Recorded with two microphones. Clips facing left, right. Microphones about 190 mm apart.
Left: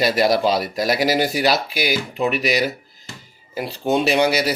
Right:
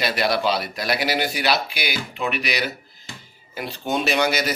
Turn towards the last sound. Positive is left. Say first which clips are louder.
# left 4 dB
turn(degrees=30)  # may be behind; listen again after turning